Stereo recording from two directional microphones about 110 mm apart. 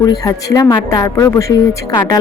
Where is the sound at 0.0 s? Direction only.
35° left (ahead or behind).